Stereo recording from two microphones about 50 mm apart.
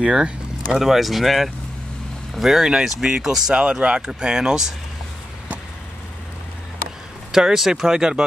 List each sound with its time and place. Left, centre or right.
0.0 s speech: centre
0.7 s speech: centre
7.3 s speech: centre